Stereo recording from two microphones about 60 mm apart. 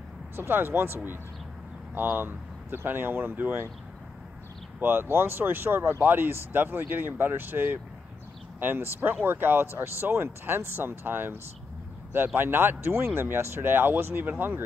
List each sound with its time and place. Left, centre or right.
0.4 s speech: right
4.7 s speech: right
12.4 s speech: right